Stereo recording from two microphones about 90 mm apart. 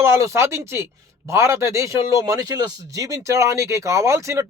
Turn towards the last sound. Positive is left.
turn(degrees=-35)  # may be behind; listen again after turning